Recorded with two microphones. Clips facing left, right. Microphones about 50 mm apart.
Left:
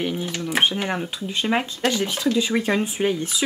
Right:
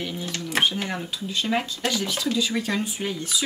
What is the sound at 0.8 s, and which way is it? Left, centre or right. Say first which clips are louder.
Speech: left 4 dB; left.